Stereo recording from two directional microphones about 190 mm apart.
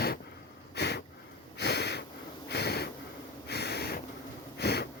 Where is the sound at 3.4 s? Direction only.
60° left (ahead or behind).